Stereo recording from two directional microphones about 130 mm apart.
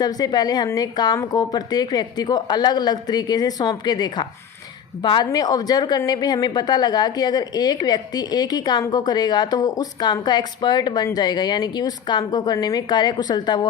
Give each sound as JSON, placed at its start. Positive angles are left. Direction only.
{"t": 0.0, "sound": "a woman's voice", "side_deg": 30}